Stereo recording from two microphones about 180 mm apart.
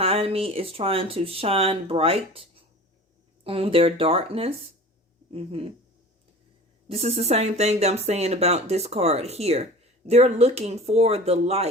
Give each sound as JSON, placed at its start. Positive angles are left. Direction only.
{"t": 0.0, "sound": "speech", "side_deg": -35}
{"t": 3.4, "sound": "speech", "side_deg": -30}
{"t": 6.8, "sound": "speech", "side_deg": -35}